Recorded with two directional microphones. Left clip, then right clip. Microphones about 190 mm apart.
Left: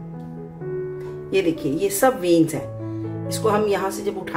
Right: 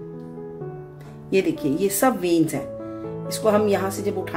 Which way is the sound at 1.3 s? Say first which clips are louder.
Even; 45° right (ahead or behind).